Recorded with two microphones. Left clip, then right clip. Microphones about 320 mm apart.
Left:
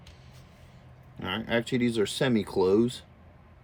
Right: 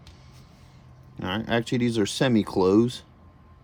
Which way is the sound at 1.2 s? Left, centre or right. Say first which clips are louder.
Right 2 dB; centre.